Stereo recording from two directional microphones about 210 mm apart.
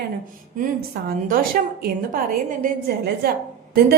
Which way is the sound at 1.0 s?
45° right (ahead or behind).